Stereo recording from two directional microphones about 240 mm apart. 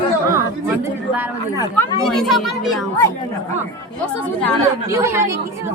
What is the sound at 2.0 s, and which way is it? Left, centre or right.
Speech, centre.